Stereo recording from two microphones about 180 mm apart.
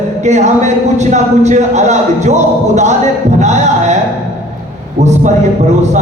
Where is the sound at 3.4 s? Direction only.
40° right (ahead or behind).